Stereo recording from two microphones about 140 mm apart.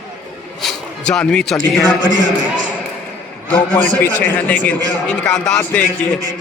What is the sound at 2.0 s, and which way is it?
Speech, 70° right (ahead or behind).